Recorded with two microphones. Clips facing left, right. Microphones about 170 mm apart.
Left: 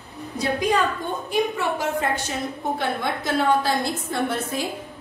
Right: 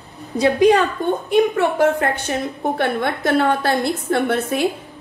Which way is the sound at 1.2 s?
60° right (ahead or behind).